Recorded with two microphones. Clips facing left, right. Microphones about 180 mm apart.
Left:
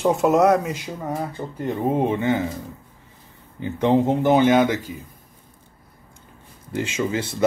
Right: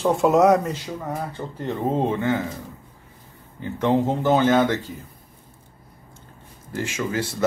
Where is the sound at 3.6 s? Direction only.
20° left (ahead or behind).